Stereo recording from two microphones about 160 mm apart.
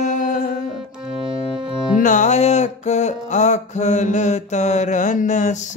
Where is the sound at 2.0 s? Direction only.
50° left (ahead or behind).